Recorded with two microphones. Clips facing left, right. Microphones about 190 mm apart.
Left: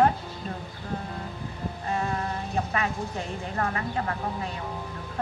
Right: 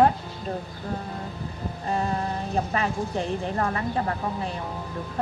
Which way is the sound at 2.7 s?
35° right (ahead or behind).